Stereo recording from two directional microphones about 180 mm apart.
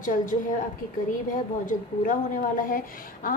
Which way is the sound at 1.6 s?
50° left (ahead or behind).